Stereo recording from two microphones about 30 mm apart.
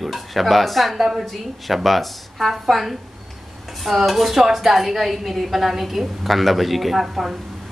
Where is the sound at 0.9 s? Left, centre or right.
Centre.